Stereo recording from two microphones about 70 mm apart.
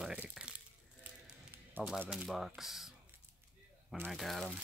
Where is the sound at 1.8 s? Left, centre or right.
Right.